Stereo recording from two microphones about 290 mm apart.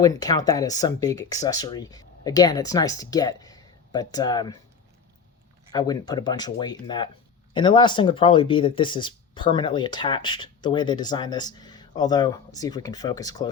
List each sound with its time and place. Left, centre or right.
0.0 s speech: centre
5.7 s speech: centre